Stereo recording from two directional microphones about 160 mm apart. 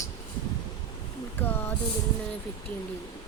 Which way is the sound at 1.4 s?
15° left (ahead or behind).